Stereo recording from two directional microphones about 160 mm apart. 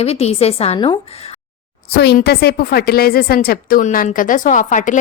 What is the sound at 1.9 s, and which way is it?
A woman's voice, 85° left.